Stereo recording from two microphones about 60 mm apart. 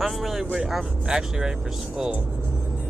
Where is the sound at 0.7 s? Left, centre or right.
Centre.